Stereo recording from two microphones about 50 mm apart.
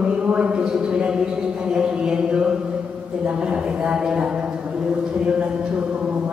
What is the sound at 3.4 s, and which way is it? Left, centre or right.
Speech, centre.